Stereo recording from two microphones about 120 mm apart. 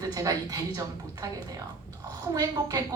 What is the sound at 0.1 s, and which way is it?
Speech, 30° right (ahead or behind).